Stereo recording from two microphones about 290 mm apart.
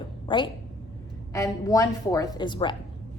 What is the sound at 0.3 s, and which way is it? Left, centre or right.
A woman's voice, centre.